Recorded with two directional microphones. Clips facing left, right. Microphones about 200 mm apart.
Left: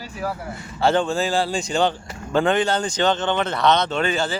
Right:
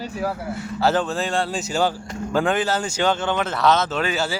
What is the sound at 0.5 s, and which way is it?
Speech, 5° right (ahead or behind).